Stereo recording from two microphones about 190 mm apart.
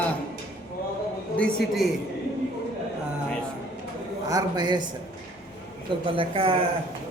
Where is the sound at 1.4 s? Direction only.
5° left (ahead or behind).